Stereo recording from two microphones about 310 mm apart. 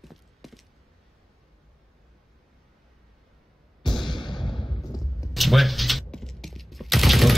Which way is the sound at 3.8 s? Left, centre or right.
Centre.